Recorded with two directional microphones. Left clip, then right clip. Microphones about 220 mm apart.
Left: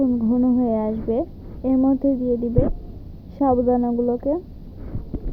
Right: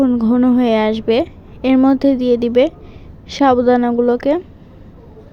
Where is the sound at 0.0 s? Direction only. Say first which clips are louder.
Right 6 dB; 75° right (ahead or behind).